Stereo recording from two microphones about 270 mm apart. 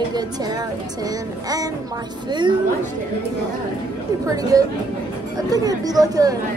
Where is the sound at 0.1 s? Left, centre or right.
Centre.